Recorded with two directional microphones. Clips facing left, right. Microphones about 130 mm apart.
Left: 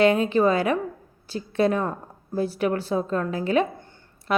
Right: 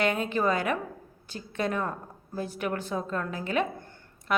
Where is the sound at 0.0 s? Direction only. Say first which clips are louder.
Left 8 dB; 35° left (ahead or behind).